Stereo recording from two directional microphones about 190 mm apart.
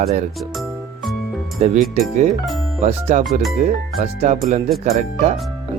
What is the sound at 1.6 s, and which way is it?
Speech, 35° right (ahead or behind).